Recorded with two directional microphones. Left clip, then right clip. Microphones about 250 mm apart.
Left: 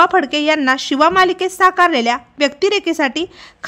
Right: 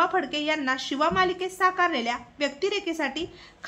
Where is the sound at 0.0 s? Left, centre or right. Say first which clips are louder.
Left 12 dB; left.